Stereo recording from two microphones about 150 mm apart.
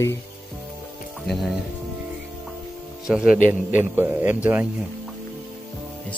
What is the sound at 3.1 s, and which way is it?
A man's voice, 5° right (ahead or behind).